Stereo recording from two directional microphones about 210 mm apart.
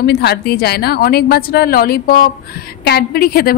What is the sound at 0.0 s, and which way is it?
A woman's voice, 50° left (ahead or behind).